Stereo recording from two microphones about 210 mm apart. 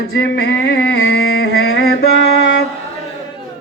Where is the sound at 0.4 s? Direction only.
55° left (ahead or behind).